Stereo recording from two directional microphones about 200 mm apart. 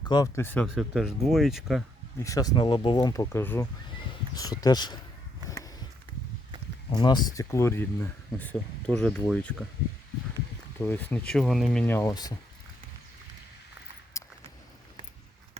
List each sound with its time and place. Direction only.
0.0 s speech: 20° left (ahead or behind); by 1.8 s centre (ahead or behind)
2.1 s speech: 15° left (ahead or behind)
6.9 s speech: 20° left (ahead or behind); by 9.6 s 5° left (ahead or behind)
10.8 s speech: 10° left (ahead or behind)
14.2 s a sound: 15° left (ahead or behind)